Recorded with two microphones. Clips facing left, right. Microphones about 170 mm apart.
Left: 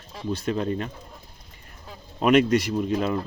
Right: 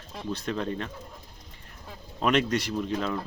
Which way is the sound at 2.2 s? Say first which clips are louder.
Left 6 dB; 10° left (ahead or behind).